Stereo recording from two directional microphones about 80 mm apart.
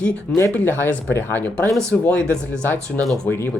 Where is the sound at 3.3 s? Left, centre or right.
Left.